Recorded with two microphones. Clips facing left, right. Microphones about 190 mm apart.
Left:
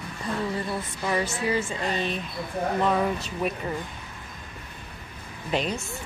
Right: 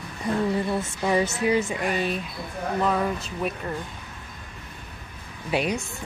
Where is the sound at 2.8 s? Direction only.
Centre (ahead or behind).